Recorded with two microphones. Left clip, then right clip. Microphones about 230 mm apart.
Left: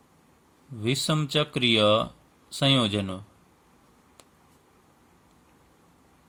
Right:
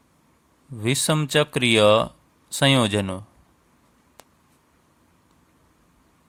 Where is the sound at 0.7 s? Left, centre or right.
Right.